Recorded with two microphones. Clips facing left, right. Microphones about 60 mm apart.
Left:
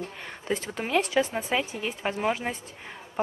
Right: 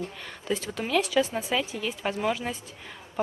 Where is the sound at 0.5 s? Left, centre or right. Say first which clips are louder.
Even; left.